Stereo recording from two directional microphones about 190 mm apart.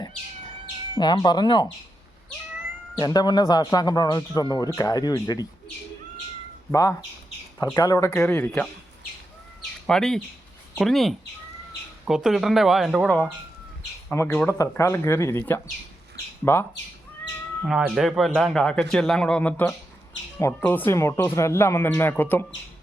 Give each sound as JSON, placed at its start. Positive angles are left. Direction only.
{"t": 0.9, "sound": "speech", "side_deg": 25}
{"t": 3.0, "sound": "speech", "side_deg": 20}
{"t": 6.7, "sound": "speech", "side_deg": 15}
{"t": 9.8, "sound": "a man's voice", "side_deg": 5}
{"t": 17.7, "sound": "a man's voice", "side_deg": -5}